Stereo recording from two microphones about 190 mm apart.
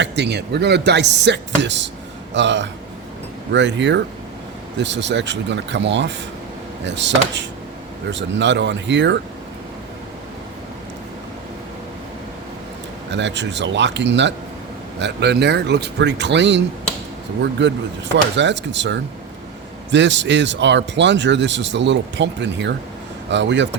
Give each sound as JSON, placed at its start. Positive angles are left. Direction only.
{"t": 0.0, "sound": "speech", "side_deg": -60}
{"t": 13.1, "sound": "speech", "side_deg": -70}